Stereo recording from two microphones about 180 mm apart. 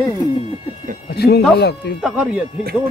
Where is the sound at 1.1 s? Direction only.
65° left (ahead or behind).